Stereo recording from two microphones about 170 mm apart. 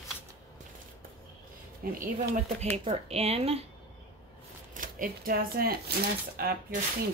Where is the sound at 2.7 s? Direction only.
40° right (ahead or behind).